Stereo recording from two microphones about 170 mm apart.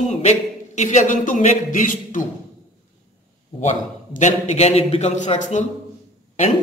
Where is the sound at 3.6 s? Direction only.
45° left (ahead or behind).